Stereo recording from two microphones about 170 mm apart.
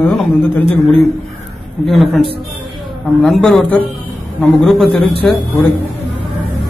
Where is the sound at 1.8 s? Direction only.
Centre (ahead or behind).